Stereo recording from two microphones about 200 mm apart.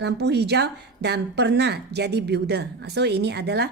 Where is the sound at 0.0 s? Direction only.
60° right (ahead or behind).